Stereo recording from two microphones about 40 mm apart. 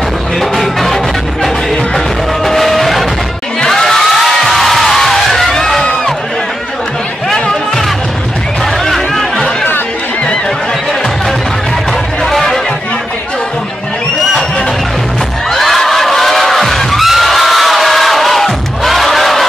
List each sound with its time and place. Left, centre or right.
0.4 s music: centre
2.4 s music: centre
7.3 s music: centre
8.8 s music: centre
12.3 s chatter: centre
15.5 s bang: centre
17.1 s music: centre